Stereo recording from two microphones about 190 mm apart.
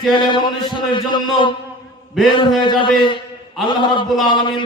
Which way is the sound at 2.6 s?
25° left (ahead or behind).